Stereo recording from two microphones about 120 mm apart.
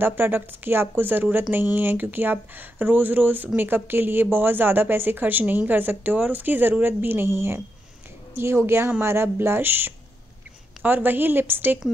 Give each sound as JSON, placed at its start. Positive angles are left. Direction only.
{"t": 0.0, "sound": "a woman's voice", "side_deg": -20}